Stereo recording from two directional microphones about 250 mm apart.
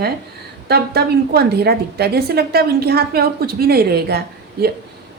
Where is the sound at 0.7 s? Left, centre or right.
Right.